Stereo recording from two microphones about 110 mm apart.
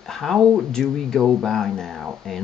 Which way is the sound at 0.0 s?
Centre (ahead or behind).